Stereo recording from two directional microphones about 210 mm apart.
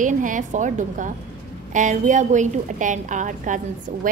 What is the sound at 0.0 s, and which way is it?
A woman's voice, 40° right (ahead or behind).